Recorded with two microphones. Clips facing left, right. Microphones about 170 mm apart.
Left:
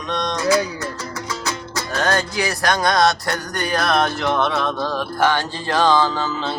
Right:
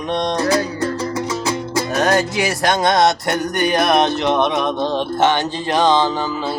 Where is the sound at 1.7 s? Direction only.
20° right (ahead or behind).